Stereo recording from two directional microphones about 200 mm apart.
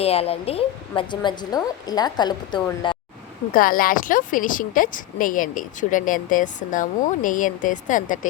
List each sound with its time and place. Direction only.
0.0 s a woman's voice: 30° left (ahead or behind)
3.5 s a woman's voice: 45° left (ahead or behind)